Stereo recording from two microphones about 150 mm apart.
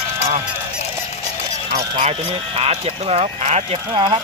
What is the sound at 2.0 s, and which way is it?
Speech, 40° right (ahead or behind).